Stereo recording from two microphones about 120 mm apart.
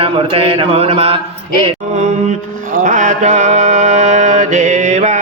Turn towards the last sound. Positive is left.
turn(degrees=-80)